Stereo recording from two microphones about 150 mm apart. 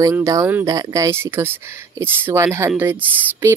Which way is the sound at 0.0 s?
20° right (ahead or behind).